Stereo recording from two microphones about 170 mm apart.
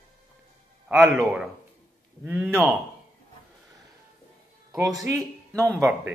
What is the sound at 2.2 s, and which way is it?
Speech, 10° right (ahead or behind).